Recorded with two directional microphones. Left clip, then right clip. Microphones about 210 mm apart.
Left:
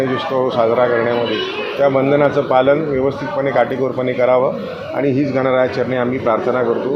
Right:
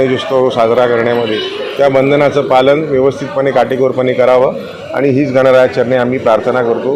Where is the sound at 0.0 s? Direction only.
50° right (ahead or behind).